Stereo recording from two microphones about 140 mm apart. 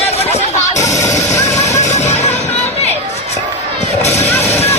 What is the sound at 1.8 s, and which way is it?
Music, 55° left (ahead or behind).